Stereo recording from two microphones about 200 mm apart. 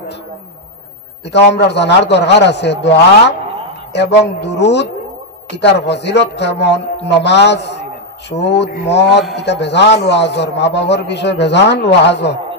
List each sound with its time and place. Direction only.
1.5 s a man's voice: 60° left (ahead or behind)